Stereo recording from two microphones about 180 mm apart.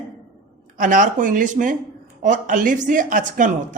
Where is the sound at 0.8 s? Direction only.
45° right (ahead or behind).